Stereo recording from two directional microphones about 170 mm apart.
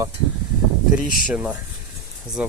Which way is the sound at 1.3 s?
10° right (ahead or behind).